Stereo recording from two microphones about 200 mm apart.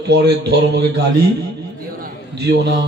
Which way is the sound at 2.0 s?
55° right (ahead or behind).